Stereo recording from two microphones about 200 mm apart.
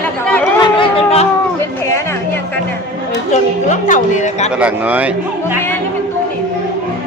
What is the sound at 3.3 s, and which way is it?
Speech, 35° left (ahead or behind).